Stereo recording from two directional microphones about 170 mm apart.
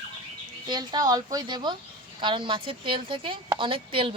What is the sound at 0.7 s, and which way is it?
A woman's voice, 25° right (ahead or behind).